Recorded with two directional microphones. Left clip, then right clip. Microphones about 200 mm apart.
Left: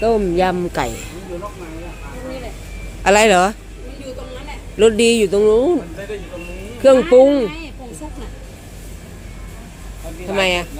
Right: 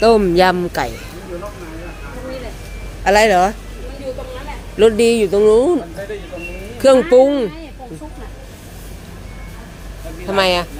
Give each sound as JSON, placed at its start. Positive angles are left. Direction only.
{"t": 0.0, "sound": "speech", "side_deg": -15}
{"t": 3.0, "sound": "speech", "side_deg": 15}
{"t": 4.8, "sound": "speech", "side_deg": 5}
{"t": 5.5, "sound": "speech", "side_deg": -5}
{"t": 6.8, "sound": "speech", "side_deg": -5}
{"t": 10.3, "sound": "speech", "side_deg": -10}